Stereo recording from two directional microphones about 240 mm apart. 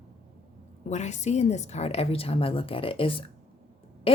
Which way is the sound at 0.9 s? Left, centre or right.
Left.